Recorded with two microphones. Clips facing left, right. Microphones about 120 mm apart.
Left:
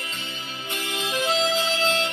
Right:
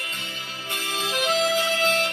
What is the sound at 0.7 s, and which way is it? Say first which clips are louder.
Music: even; 20° left (ahead or behind).